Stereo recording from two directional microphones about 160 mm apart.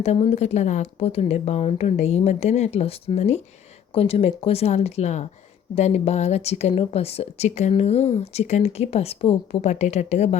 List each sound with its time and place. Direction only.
0.0 s speech: 40° left (ahead or behind)